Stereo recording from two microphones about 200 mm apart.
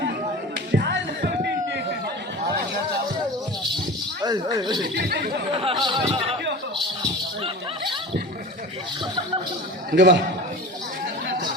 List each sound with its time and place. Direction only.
0.7 s music: 60° right (ahead or behind)
4.2 s speech: 20° right (ahead or behind)
4.9 s speech: 55° right (ahead or behind)
5.5 s speech: 25° right (ahead or behind)
9.9 s a man's voice: 60° right (ahead or behind)